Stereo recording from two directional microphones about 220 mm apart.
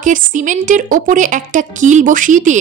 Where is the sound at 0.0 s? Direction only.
35° right (ahead or behind).